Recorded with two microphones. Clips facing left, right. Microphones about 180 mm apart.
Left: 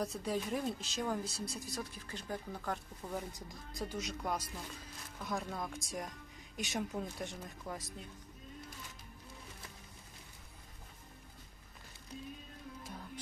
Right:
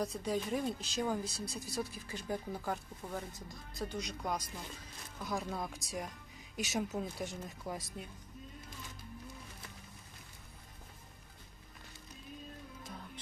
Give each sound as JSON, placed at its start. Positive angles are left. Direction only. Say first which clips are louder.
{"t": 0.0, "sound": "speech", "louder": "right 1 dB", "side_deg": 0}
{"t": 3.3, "sound": "speech", "louder": "even", "side_deg": 15}
{"t": 3.9, "sound": "speech", "louder": "even", "side_deg": 0}